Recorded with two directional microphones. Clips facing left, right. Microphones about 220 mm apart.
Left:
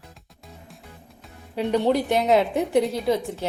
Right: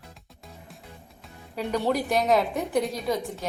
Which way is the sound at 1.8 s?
25° left (ahead or behind).